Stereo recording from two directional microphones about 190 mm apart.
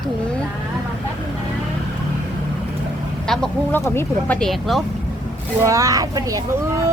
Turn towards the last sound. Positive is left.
turn(degrees=-15)  # may be behind; listen again after turning